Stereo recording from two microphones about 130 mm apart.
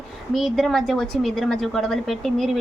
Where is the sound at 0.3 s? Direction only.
Centre (ahead or behind).